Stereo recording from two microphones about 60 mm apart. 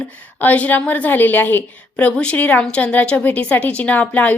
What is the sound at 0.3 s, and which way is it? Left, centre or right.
A woman's voice, left.